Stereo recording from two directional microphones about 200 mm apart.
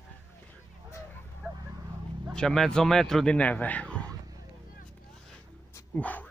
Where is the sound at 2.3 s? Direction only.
5° left (ahead or behind).